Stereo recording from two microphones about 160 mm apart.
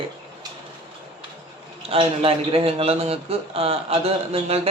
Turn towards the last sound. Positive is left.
turn(degrees=-40)  # may be behind; listen again after turning